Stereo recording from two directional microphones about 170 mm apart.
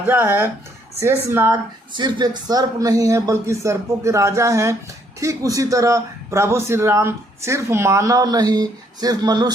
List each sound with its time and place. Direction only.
0.0 s speech: 10° right (ahead or behind)
2.0 s a man's voice: 25° right (ahead or behind)